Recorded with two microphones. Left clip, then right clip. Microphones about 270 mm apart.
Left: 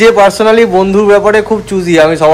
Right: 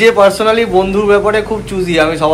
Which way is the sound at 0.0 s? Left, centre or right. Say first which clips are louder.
Left 3 dB; left.